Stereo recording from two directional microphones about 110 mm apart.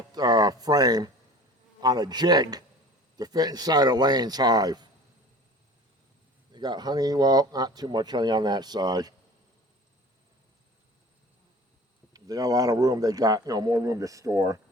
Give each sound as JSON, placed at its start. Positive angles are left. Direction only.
{"t": 0.1, "sound": "a sound", "side_deg": -35}
{"t": 1.8, "sound": "speech", "side_deg": -40}
{"t": 6.5, "sound": "speech", "side_deg": -40}
{"t": 12.1, "sound": "speech", "side_deg": -35}